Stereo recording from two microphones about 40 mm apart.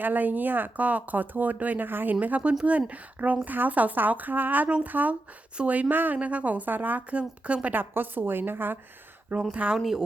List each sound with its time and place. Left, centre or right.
0.0 s speech: right
0.8 s speech: right
1.9 s a woman's voice: right
2.2 s a woman's voice: right
5.9 s speech: right
6.1 s a woman's voice: right
7.1 s a woman's voice: right
7.7 s a woman's voice: right
9.3 s a woman's voice: right
9.7 s speech: centre